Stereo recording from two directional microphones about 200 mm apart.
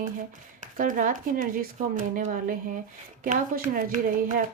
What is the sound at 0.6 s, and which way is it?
A woman's voice, 40° right (ahead or behind).